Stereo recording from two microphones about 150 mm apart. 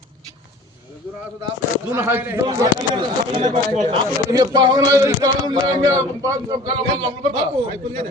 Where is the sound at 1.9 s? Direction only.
15° right (ahead or behind).